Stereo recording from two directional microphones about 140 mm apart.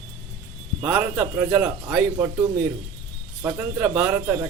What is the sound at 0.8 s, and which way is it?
A man's voice, 15° right (ahead or behind).